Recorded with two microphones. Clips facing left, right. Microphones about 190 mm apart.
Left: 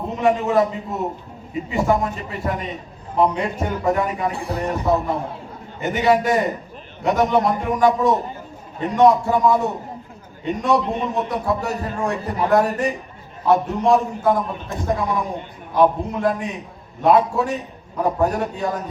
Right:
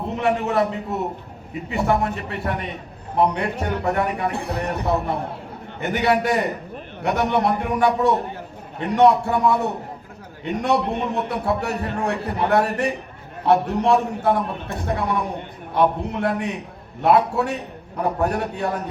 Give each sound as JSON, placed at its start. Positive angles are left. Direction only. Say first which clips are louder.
{"t": 0.2, "sound": "a man's voice", "louder": "left 3 dB", "side_deg": -65}
{"t": 1.8, "sound": "a man's voice", "louder": "left 1 dB", "side_deg": -65}